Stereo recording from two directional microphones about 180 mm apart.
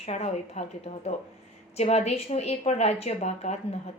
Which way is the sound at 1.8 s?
35° left (ahead or behind).